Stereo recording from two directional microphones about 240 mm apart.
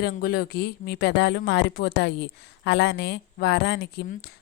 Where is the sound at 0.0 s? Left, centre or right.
Left.